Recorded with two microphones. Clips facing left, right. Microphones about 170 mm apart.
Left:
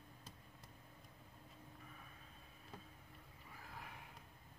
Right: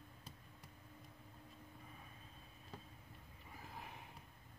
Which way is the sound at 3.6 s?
20° right (ahead or behind).